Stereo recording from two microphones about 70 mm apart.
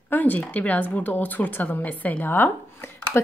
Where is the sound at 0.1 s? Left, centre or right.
Left.